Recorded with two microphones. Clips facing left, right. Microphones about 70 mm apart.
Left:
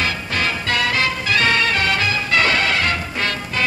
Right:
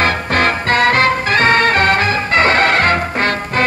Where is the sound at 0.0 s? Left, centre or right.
Right.